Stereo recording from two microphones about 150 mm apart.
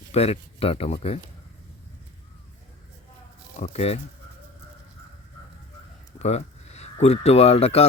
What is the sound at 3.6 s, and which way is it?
Speech, 45° left (ahead or behind).